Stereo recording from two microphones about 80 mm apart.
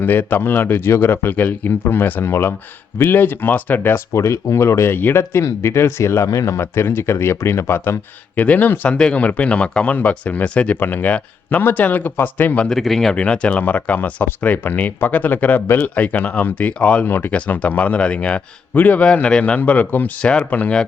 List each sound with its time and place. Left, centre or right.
0.0 s speech: left
4.1 s speech: left
12.6 s speech: centre
13.1 s speech: centre